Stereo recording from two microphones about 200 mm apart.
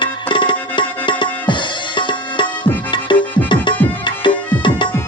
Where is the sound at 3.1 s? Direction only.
25° left (ahead or behind).